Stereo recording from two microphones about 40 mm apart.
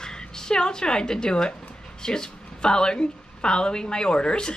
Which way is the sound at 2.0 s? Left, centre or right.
Centre.